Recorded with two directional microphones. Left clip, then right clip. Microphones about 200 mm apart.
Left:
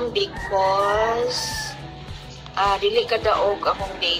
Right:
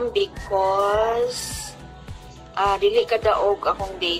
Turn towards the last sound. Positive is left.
turn(degrees=-40)  # may be behind; listen again after turning